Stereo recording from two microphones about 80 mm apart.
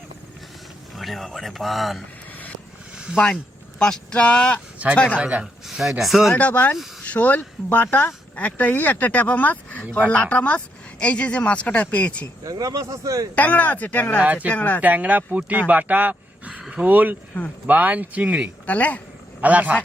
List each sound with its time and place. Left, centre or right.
0.9 s speech: centre
2.9 s a sound: centre
3.8 s speech: centre
5.1 s speech: centre
6.3 s speech: centre
12.5 s speech: right
13.3 s speech: centre
14.8 s speech: centre
18.6 s speech: centre
19.4 s a man's voice: centre